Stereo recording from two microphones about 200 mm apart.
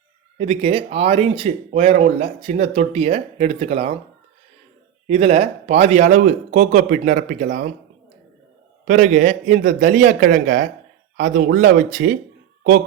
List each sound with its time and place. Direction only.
0.3 s speech: 30° right (ahead or behind)
5.0 s speech: 30° right (ahead or behind)
8.9 s speech: 40° right (ahead or behind)